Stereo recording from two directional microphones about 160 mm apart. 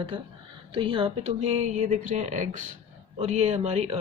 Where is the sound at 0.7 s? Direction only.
35° right (ahead or behind).